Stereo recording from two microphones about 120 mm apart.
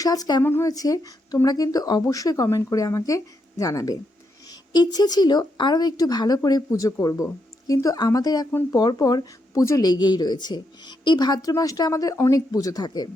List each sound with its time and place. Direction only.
0.0 s speech: 30° left (ahead or behind)
0.4 s speech: 20° left (ahead or behind)
0.7 s speech: 30° left (ahead or behind)